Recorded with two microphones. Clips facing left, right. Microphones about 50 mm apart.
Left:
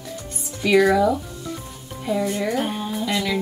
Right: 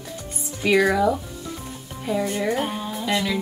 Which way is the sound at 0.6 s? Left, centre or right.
Centre.